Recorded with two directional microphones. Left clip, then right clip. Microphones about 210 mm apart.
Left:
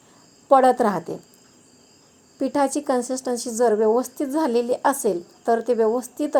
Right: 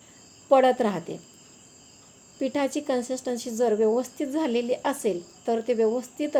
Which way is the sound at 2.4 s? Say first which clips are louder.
Left 5 dB; 15° left (ahead or behind).